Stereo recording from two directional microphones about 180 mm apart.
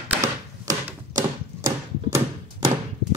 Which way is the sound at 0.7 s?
20° right (ahead or behind).